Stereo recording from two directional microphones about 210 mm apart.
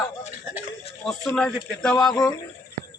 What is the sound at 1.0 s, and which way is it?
Speech, 5° left (ahead or behind).